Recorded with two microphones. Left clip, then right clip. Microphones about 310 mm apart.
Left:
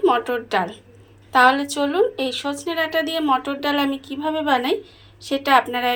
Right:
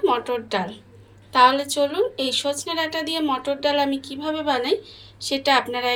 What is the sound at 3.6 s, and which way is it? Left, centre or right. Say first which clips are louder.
Speech: right 2 dB; left.